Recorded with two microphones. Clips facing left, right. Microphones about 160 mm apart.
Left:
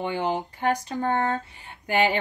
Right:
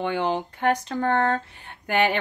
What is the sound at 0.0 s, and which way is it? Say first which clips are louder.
Speech: right 2 dB; 60° right (ahead or behind).